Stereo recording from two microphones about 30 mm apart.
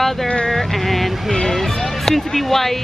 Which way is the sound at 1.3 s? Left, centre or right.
Centre.